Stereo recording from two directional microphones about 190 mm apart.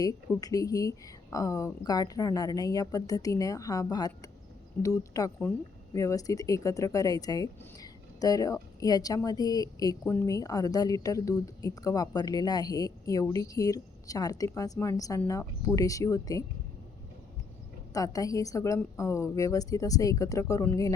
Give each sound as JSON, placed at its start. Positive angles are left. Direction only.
{"t": 0.0, "sound": "a woman's voice", "side_deg": 20}
{"t": 17.9, "sound": "speech", "side_deg": 20}